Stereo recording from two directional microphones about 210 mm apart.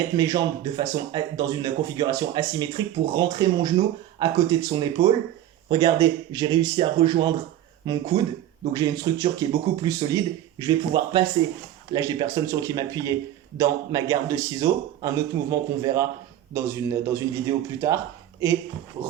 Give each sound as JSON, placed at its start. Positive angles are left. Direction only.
{"t": 0.2, "sound": "speech", "side_deg": -20}